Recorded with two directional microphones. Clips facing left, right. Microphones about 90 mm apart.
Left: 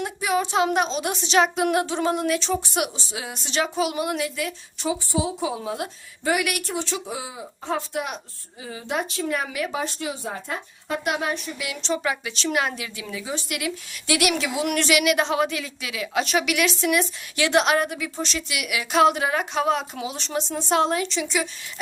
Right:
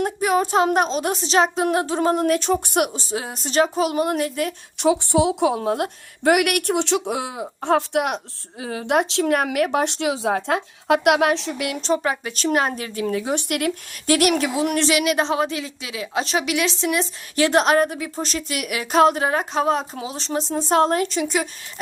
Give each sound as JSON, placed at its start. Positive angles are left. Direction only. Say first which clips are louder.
{"t": 0.0, "sound": "speech", "louder": "right 4 dB", "side_deg": -45}
{"t": 4.8, "sound": "a woman's voice", "louder": "right 7 dB", "side_deg": -70}
{"t": 11.6, "sound": "a woman's voice", "louder": "right 2 dB", "side_deg": -45}